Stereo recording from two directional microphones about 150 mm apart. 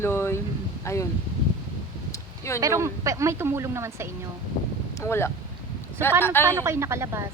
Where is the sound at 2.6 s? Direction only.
20° right (ahead or behind).